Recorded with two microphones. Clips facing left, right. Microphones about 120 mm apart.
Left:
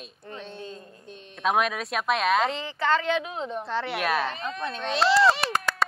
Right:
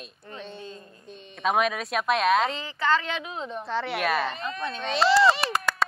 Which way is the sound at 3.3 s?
35° left (ahead or behind).